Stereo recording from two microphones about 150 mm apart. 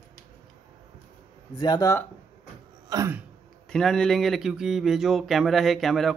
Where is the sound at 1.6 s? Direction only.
30° left (ahead or behind).